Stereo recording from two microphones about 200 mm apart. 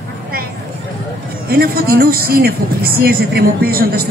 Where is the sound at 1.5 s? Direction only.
50° right (ahead or behind).